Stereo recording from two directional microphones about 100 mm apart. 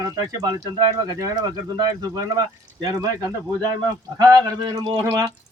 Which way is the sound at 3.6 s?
40° right (ahead or behind).